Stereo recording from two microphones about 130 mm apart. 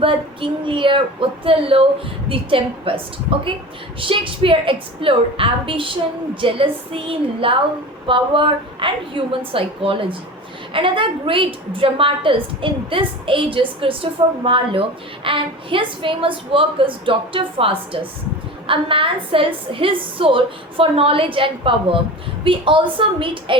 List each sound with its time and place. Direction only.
0.0 s a woman's voice: 40° right (ahead or behind)